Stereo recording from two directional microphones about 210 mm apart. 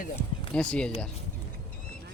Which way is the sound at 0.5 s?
5° left (ahead or behind).